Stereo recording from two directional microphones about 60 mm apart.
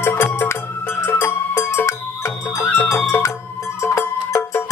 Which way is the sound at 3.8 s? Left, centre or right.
Left.